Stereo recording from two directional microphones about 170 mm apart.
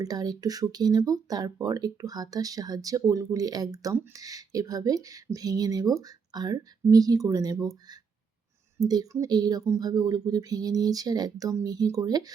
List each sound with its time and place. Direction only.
0.0 s speech: 20° right (ahead or behind)